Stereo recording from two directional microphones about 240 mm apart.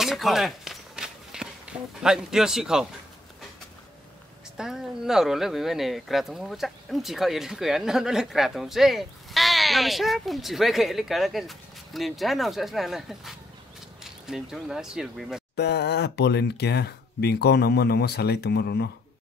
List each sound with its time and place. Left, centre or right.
0.0 s walk: centre
4.6 s speech: centre
15.5 s speech: left